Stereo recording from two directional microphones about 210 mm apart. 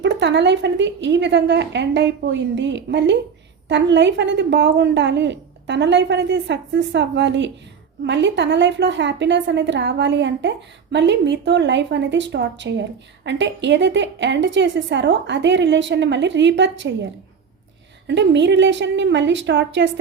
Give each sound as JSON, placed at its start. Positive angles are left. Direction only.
{"t": 0.0, "sound": "a woman's voice", "side_deg": -55}
{"t": 18.1, "sound": "a woman's voice", "side_deg": -55}